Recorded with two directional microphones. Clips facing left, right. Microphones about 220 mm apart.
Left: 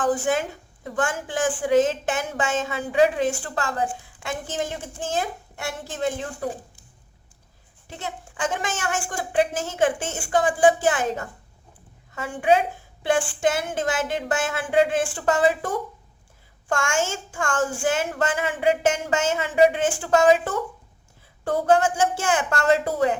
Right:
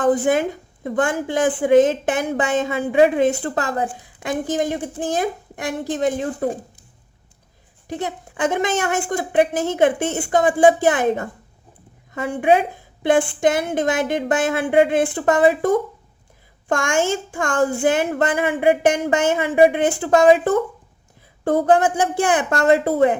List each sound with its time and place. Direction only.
0.0 s a woman's voice: 20° right (ahead or behind)
7.9 s a woman's voice: 15° right (ahead or behind)
12.4 s a woman's voice: 20° right (ahead or behind)
16.6 s a woman's voice: 20° right (ahead or behind)
21.4 s a woman's voice: 20° right (ahead or behind)